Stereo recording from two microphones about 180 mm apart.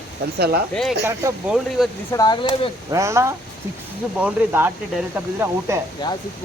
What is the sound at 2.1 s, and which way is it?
Speech, 20° left (ahead or behind).